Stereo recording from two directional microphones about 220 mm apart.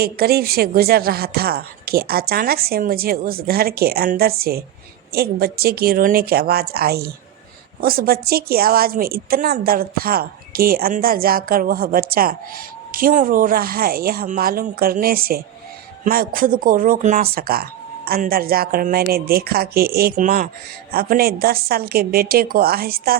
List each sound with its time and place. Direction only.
0.0 s speech: 45° right (ahead or behind)